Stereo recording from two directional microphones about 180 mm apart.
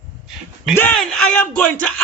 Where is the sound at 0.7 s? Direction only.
10° left (ahead or behind).